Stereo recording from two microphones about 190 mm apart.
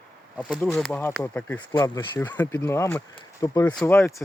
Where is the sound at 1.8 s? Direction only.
25° left (ahead or behind).